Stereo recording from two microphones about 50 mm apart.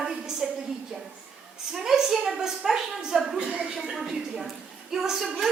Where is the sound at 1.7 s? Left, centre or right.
Centre.